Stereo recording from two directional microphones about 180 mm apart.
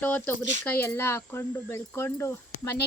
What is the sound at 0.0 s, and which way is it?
Speech, 10° left (ahead or behind).